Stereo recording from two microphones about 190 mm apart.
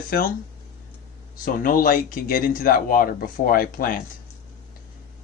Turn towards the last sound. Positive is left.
turn(degrees=50)  # may be behind; listen again after turning